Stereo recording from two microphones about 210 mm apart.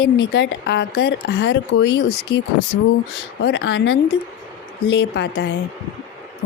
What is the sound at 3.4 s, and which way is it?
Speech, 55° left (ahead or behind).